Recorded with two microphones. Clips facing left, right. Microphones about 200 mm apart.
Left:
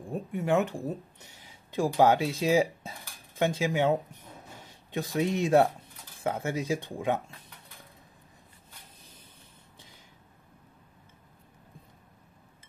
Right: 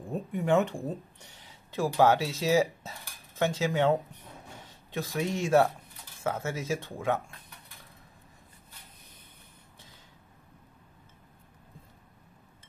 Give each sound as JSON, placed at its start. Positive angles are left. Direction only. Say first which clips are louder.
{"t": 0.1, "sound": "speech", "louder": "right 1 dB", "side_deg": 0}